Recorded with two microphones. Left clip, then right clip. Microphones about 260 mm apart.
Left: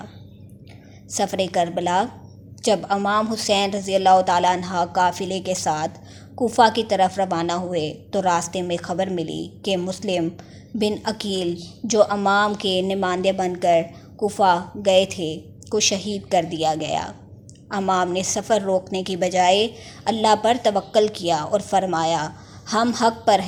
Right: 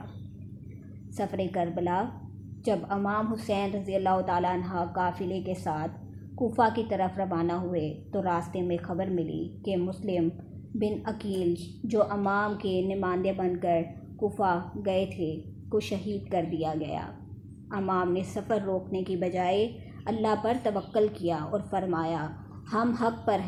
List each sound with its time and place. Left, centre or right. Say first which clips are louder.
1.1 s a woman's voice: left 10 dB; left